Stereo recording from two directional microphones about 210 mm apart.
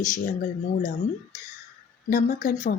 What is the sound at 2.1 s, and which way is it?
Speech, 40° left (ahead or behind).